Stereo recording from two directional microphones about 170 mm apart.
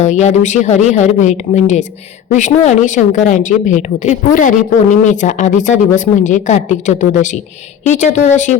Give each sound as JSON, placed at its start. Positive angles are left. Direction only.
{"t": 0.0, "sound": "a woman's voice", "side_deg": 45}